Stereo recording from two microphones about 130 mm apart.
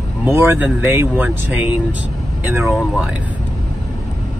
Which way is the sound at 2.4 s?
15° right (ahead or behind).